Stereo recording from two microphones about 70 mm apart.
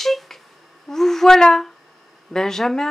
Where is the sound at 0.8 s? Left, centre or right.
Centre.